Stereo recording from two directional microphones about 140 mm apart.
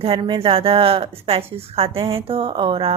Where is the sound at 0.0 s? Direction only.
40° right (ahead or behind).